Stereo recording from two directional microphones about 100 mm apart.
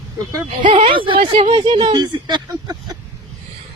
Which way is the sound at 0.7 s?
60° right (ahead or behind).